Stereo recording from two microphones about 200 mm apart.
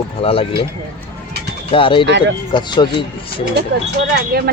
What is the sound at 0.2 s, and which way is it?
Speech, 30° left (ahead or behind).